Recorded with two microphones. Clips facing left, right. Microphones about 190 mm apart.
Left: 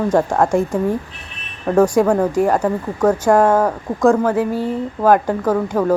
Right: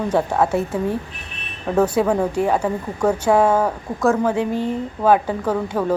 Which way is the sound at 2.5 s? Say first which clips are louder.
Left 3 dB; 10° right (ahead or behind).